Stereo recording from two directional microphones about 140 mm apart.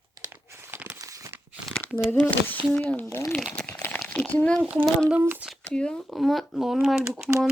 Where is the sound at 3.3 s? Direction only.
5° left (ahead or behind).